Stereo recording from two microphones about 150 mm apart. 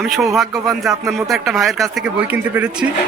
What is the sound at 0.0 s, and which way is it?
Speech, centre (ahead or behind).